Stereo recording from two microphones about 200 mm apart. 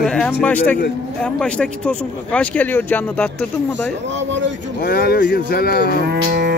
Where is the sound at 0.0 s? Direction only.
5° left (ahead or behind).